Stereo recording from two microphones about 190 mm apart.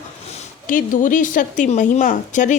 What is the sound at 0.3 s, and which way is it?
Speech, 40° left (ahead or behind).